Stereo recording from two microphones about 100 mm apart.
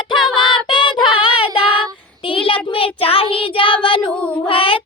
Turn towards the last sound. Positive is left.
turn(degrees=60)  # may be behind; listen again after turning